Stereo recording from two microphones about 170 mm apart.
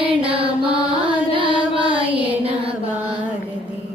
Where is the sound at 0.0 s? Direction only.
35° right (ahead or behind).